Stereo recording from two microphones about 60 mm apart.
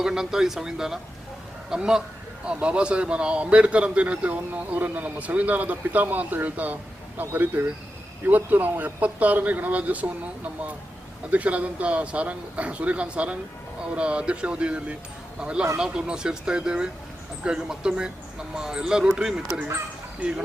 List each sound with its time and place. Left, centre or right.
0.0 s a man's voice: centre